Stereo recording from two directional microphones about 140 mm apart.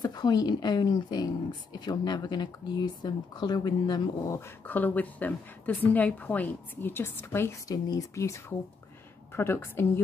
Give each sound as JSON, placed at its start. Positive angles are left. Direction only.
{"t": 0.0, "sound": "speech", "side_deg": 30}
{"t": 4.4, "sound": "a woman's voice", "side_deg": 15}